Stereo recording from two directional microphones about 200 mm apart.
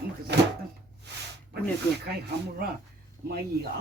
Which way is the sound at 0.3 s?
60° right (ahead or behind).